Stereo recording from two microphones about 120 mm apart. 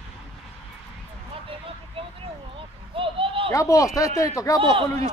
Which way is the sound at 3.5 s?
25° left (ahead or behind).